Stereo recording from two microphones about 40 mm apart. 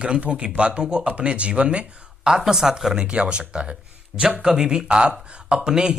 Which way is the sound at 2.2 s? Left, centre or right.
Centre.